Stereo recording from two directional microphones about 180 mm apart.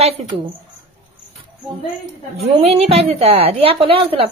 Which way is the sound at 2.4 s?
35° right (ahead or behind).